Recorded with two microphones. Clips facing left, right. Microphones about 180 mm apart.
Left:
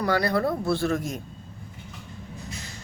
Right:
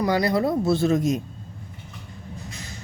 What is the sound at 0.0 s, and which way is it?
A man's voice, 15° right (ahead or behind).